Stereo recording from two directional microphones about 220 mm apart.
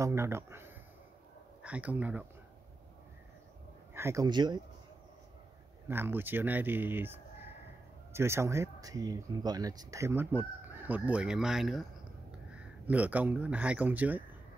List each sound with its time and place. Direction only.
0.0 s speech: 10° right (ahead or behind)
3.9 s speech: 10° right (ahead or behind)
5.9 s speech: 10° right (ahead or behind)